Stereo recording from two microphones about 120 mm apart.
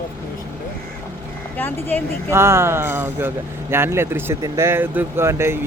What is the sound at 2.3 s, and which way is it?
Speech, 20° right (ahead or behind).